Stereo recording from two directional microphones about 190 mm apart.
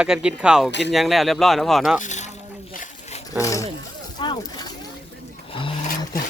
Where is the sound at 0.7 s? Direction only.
65° left (ahead or behind).